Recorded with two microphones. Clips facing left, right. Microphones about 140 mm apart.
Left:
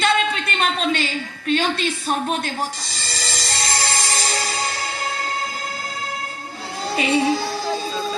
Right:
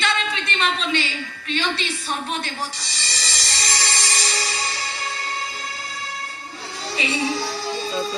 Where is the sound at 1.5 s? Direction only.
50° left (ahead or behind).